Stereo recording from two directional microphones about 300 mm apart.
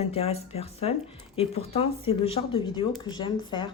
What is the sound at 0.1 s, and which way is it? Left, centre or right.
Speech, centre.